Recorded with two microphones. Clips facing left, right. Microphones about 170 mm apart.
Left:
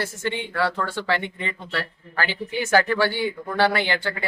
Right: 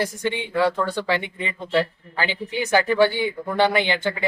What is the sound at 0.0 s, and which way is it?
Speech, 15° right (ahead or behind).